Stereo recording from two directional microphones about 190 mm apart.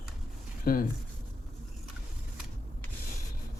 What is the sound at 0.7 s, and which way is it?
Speech, 50° left (ahead or behind).